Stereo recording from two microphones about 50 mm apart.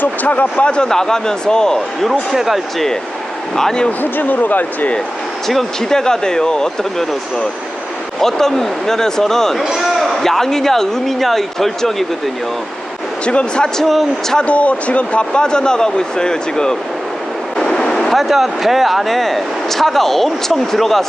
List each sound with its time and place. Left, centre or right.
0.0 s speech: left; by 2.0 s centre
2.0 s speech: centre
3.5 s speech: centre
4.0 s speech: left
5.5 s speech: centre
8.2 s speech: centre
9.6 s a sound: centre
10.2 s speech: centre
13.2 s speech: left
13.7 s speech: centre
14.3 s speech: left; by 21.0 s centre